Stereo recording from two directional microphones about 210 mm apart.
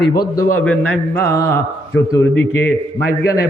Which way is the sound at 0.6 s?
5° left (ahead or behind).